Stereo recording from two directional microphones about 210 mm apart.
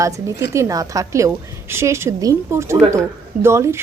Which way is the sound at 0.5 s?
15° right (ahead or behind).